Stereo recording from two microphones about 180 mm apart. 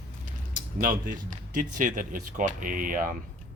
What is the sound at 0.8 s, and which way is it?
Speech, 45° right (ahead or behind).